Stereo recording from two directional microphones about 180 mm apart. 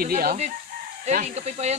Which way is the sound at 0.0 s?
55° right (ahead or behind).